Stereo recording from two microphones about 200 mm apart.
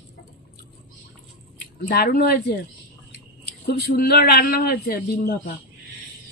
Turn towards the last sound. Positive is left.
turn(degrees=55)  # may be behind; listen again after turning